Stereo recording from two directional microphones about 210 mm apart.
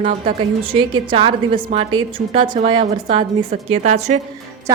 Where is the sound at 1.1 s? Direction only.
25° right (ahead or behind).